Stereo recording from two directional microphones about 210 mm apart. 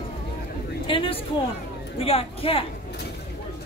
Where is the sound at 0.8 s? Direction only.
25° left (ahead or behind).